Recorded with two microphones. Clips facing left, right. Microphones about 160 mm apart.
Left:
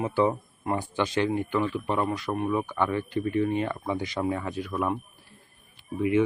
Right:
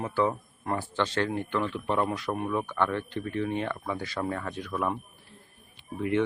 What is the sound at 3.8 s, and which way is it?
Speech, 15° left (ahead or behind).